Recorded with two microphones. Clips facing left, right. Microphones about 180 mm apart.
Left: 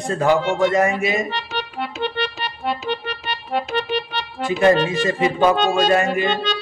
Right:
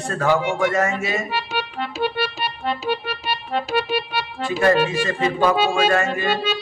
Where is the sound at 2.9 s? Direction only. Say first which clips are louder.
Right 1 dB; 10° right (ahead or behind).